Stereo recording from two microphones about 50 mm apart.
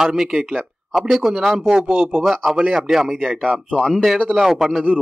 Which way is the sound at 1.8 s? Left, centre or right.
Right.